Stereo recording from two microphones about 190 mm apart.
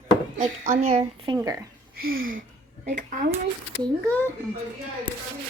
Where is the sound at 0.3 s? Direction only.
45° right (ahead or behind).